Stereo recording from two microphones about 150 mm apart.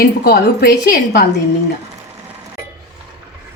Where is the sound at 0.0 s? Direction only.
90° left.